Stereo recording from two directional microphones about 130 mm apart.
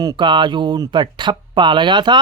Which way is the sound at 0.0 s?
35° right (ahead or behind).